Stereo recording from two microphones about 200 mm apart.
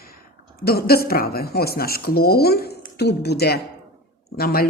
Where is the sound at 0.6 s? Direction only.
50° left (ahead or behind).